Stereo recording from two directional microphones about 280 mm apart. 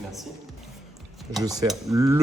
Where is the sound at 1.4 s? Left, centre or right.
Centre.